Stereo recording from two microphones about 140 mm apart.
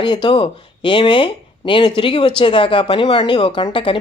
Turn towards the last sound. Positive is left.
turn(degrees=35)  # may be behind; listen again after turning